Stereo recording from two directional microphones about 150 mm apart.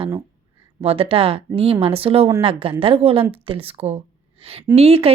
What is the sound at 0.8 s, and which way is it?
Speech, 40° right (ahead or behind).